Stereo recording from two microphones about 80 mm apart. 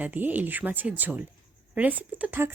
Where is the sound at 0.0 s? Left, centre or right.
Right.